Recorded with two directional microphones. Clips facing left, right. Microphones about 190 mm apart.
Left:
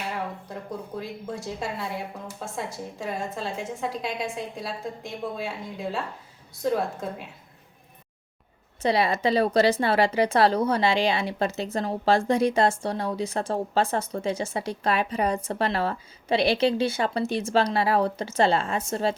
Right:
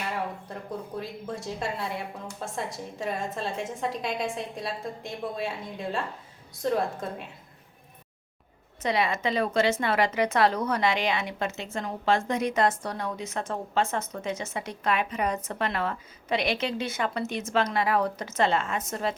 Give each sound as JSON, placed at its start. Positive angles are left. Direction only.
{"t": 0.4, "sound": "a woman's voice", "side_deg": 5}
{"t": 8.8, "sound": "speech", "side_deg": 35}